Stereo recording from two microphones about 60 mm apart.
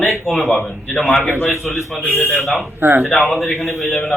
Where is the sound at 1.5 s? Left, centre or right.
Left.